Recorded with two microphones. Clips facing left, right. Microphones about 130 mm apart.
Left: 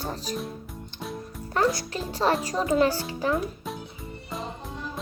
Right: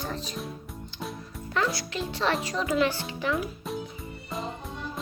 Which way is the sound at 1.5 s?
40° left (ahead or behind).